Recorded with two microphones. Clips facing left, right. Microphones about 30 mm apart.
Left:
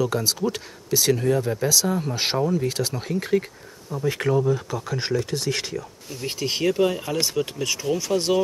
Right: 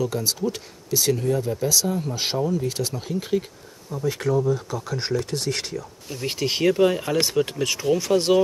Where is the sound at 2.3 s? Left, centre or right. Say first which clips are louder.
Left 1 dB; left; by 3.4 s centre.